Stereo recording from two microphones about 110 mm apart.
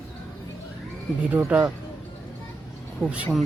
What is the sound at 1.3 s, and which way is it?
Speech, 10° right (ahead or behind).